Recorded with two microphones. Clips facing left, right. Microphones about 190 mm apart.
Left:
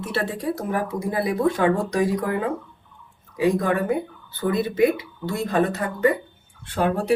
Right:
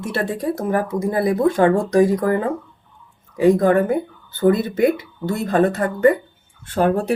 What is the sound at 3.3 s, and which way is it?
Speech, 50° right (ahead or behind).